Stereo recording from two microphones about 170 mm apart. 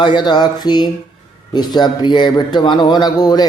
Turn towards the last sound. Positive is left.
turn(degrees=25)  # may be behind; listen again after turning